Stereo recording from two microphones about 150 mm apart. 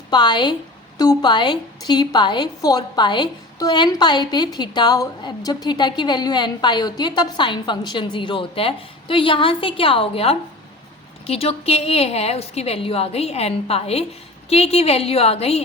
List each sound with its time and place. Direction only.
0.1 s a woman's voice: 30° left (ahead or behind)